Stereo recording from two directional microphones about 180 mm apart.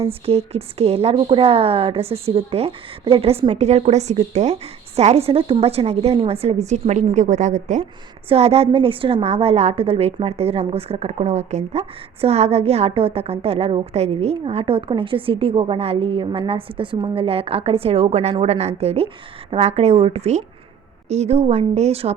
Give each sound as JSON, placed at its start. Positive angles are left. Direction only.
{"t": 0.0, "sound": "a woman's voice", "side_deg": -35}